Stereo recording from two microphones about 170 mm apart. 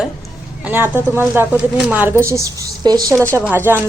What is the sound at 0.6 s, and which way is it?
A woman's voice, 10° right (ahead or behind).